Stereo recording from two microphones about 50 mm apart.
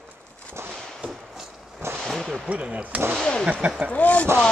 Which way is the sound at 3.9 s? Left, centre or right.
Left.